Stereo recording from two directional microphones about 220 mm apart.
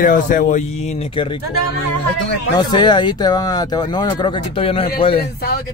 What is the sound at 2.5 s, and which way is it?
Speech, 20° left (ahead or behind).